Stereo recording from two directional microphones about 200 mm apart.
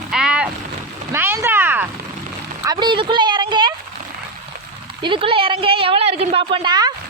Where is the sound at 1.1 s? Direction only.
10° right (ahead or behind).